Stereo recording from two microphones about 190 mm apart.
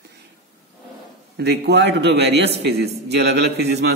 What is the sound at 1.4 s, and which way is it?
A man's voice, 60° right (ahead or behind).